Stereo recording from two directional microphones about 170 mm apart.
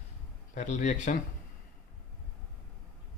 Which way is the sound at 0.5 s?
50° left (ahead or behind).